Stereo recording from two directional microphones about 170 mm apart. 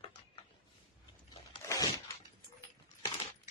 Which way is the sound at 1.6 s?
15° left (ahead or behind).